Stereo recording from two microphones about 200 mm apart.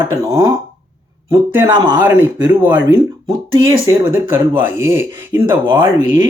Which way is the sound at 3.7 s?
15° right (ahead or behind).